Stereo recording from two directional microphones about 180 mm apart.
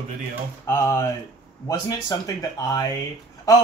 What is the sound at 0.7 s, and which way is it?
A man's voice, 15° left (ahead or behind).